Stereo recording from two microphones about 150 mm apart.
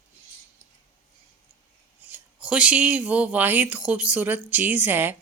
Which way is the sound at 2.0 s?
10° right (ahead or behind).